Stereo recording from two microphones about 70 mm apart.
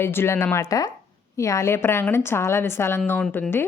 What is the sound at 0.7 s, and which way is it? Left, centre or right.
Speech, left.